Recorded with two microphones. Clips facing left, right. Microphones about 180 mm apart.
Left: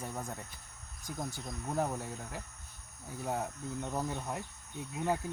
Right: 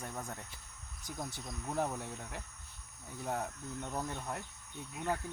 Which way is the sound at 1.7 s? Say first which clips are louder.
Left 2 dB; 5° left (ahead or behind).